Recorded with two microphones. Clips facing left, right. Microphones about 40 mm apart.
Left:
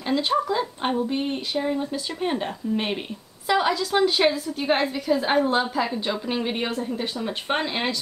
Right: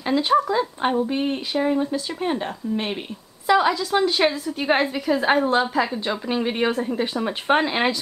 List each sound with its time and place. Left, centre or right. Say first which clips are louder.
0.0 s a woman's voice: right 4 dB; centre
6.8 s a woman's voice: right 4 dB; centre